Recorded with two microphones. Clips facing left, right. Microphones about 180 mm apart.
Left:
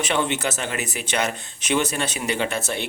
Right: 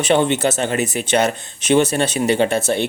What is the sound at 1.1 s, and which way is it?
Speech, 45° right (ahead or behind).